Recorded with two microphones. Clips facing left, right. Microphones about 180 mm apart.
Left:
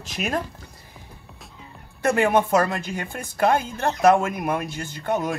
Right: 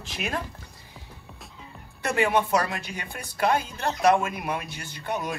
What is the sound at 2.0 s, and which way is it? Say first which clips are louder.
Speech: left 4 dB; 50° left (ahead or behind).